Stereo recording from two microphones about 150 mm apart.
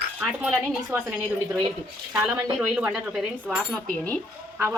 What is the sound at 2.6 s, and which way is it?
Speech, 5° right (ahead or behind).